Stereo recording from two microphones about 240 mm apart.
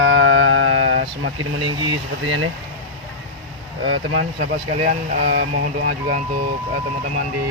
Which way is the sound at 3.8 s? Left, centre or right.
Right.